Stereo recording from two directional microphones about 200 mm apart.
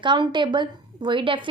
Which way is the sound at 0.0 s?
25° right (ahead or behind).